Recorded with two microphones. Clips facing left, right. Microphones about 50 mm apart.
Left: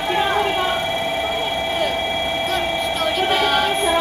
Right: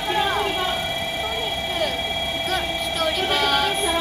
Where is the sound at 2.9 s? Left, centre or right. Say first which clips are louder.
Left 2 dB; centre.